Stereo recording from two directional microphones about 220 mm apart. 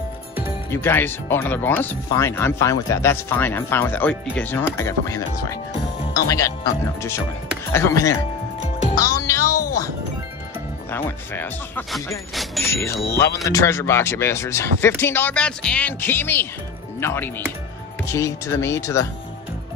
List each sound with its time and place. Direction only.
0.7 s speech: 10° left (ahead or behind)
7.7 s speech: 15° left (ahead or behind)
9.2 s music: 15° left (ahead or behind)
10.9 s speech: 10° left (ahead or behind)
12.6 s speech: 10° left (ahead or behind)